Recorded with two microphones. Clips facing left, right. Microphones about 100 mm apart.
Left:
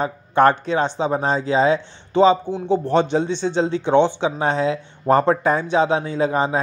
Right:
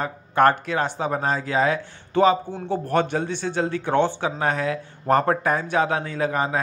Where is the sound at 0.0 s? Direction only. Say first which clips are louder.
Left 3 dB; 25° left (ahead or behind).